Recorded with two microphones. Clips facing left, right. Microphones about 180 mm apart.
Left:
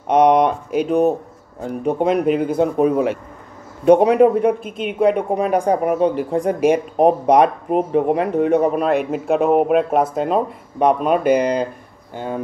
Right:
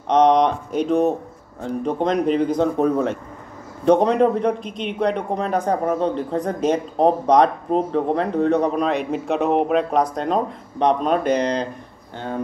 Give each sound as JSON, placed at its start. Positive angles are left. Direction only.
{"t": 0.1, "sound": "a man's voice", "side_deg": 10}